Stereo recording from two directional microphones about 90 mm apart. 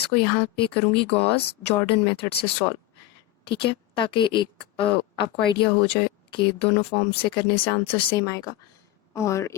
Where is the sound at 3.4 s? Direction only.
70° left (ahead or behind).